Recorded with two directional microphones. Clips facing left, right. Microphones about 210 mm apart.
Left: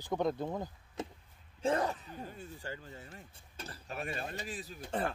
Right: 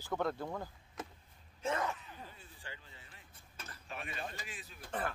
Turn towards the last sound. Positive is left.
turn(degrees=30)  # may be behind; listen again after turning